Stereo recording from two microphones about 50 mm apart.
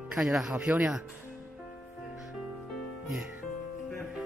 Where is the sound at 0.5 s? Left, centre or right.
Right.